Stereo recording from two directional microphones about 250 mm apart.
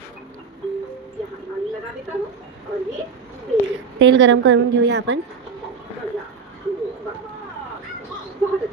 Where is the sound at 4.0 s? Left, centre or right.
Right.